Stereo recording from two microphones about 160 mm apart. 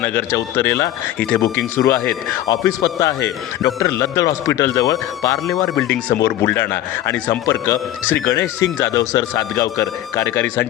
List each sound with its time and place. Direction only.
0.0 s a man's voice: 15° left (ahead or behind)